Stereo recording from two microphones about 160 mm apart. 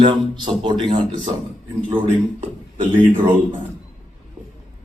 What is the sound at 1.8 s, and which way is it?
Speech, 35° right (ahead or behind).